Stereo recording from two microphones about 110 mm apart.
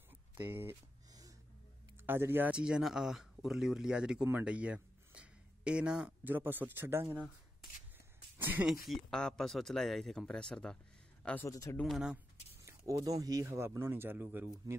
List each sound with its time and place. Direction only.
0.4 s speech: 20° right (ahead or behind)
2.0 s a man's voice: 20° right (ahead or behind)
8.4 s speech: 15° right (ahead or behind)
8.6 s speech: centre (ahead or behind)
11.4 s speech: 30° left (ahead or behind)
11.8 s speech: 5° right (ahead or behind)
12.6 s speech: 30° right (ahead or behind); by 14.5 s 15° right (ahead or behind)